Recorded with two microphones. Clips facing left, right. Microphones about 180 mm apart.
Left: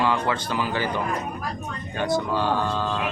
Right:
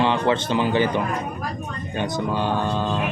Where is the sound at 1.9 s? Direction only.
20° right (ahead or behind).